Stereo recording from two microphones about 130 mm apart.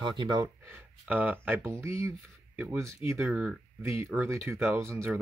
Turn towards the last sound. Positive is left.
turn(degrees=-25)  # may be behind; listen again after turning